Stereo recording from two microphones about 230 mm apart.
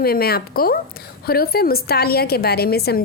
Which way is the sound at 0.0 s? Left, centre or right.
Left.